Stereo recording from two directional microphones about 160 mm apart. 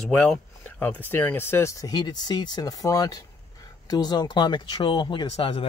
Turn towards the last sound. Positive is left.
turn(degrees=35)  # may be behind; listen again after turning